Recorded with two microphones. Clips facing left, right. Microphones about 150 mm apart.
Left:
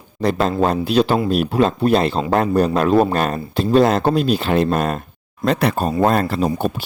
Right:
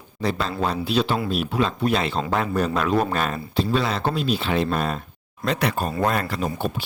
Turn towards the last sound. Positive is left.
turn(degrees=35)  # may be behind; listen again after turning